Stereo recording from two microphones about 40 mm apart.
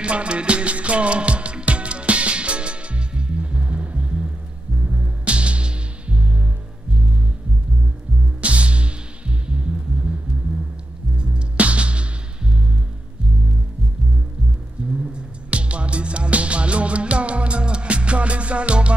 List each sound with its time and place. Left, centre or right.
0.0 s music: right
8.4 s music: right
11.1 s music: right
14.8 s music: right